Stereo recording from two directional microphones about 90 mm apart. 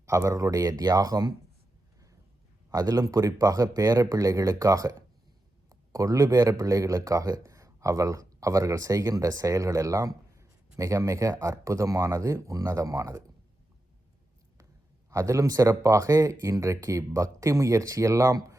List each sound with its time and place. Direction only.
0.0 s speech: 35° right (ahead or behind)
2.6 s speech: 40° right (ahead or behind)
15.1 s speech: 35° right (ahead or behind)